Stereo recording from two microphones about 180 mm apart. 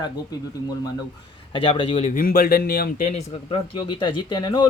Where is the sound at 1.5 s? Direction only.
30° left (ahead or behind); by 2.9 s 60° left (ahead or behind).